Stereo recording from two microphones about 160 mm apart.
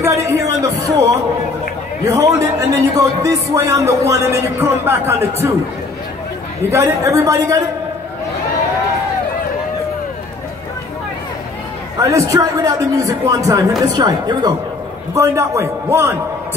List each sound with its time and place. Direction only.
0.0 s music: 20° right (ahead or behind)
2.0 s speech: 20° right (ahead or behind)
6.7 s speech: 20° right (ahead or behind)
12.0 s a man's voice: 20° right (ahead or behind)